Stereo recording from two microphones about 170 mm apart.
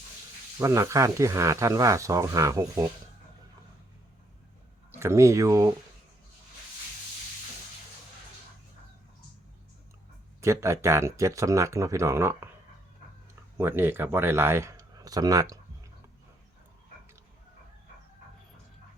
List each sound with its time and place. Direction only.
0.6 s speech: 15° right (ahead or behind)
4.9 s speech: 15° right (ahead or behind)
10.4 s speech: 15° right (ahead or behind)
13.6 s speech: 15° right (ahead or behind)